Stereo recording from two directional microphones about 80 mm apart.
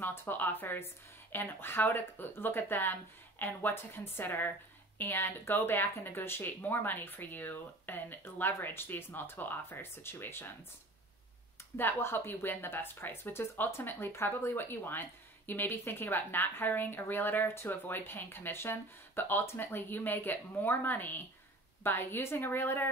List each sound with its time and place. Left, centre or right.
0.0 s speech: left
11.7 s speech: left